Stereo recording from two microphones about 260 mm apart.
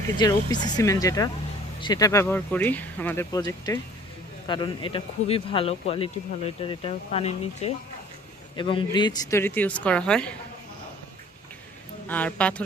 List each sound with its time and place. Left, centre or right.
0.2 s speech: centre
12.0 s speech: centre